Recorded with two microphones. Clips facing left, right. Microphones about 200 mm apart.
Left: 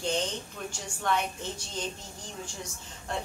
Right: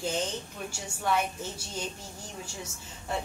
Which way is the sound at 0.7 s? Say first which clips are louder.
Even; 5° right (ahead or behind).